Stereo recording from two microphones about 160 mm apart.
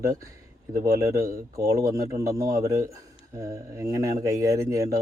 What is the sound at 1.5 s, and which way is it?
Speech, 20° right (ahead or behind).